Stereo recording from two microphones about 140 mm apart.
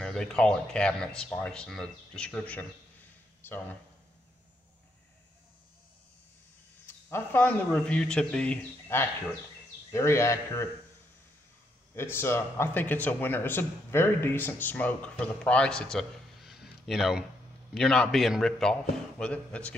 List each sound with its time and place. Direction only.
0.0 s a man's voice: 5° left (ahead or behind)
6.9 s a man's voice: 15° left (ahead or behind)
8.9 s a man's voice: 15° left (ahead or behind)
11.9 s a man's voice: 15° left (ahead or behind)